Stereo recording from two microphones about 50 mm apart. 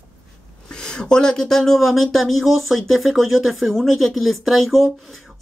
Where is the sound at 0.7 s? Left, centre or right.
Centre.